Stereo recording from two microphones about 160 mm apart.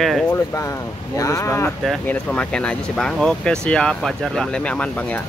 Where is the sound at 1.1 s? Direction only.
20° left (ahead or behind).